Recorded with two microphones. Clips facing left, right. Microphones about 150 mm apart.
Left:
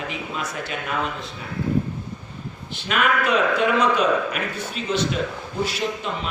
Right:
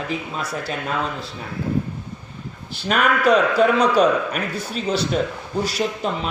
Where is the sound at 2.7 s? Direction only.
40° right (ahead or behind).